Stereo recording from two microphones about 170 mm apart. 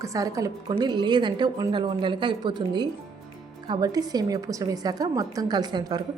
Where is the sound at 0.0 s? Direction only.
20° right (ahead or behind).